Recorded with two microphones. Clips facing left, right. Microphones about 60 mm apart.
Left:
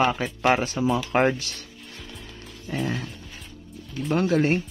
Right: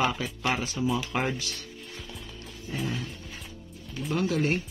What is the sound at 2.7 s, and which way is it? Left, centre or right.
Music, left.